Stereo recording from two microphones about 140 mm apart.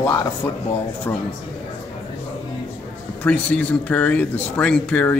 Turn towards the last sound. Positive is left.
turn(degrees=10)  # may be behind; listen again after turning